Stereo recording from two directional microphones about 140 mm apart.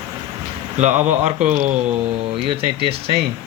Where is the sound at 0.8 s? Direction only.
55° right (ahead or behind).